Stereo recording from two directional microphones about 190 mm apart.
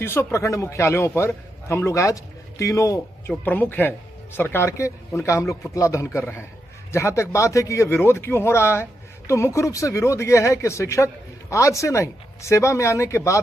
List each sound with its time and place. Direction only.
0.0 s speech: 10° left (ahead or behind)